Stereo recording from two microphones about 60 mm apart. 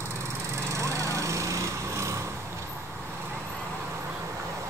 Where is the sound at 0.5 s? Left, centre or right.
Right.